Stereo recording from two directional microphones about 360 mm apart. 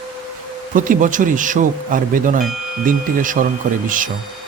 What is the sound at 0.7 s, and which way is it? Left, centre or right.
Speech, right.